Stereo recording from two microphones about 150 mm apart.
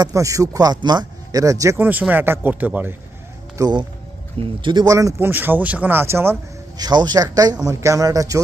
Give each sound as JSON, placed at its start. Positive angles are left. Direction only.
{"t": 0.0, "sound": "speech", "side_deg": -20}
{"t": 3.6, "sound": "speech", "side_deg": -30}
{"t": 6.7, "sound": "speech", "side_deg": -25}